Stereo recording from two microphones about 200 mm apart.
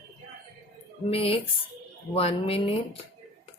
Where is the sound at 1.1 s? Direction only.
30° left (ahead or behind).